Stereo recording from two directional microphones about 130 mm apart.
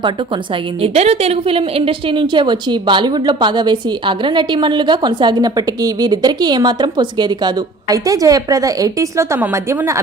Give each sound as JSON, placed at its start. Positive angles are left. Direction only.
{"t": 0.8, "sound": "a woman's voice", "side_deg": -50}